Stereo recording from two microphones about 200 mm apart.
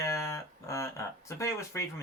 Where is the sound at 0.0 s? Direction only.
15° left (ahead or behind).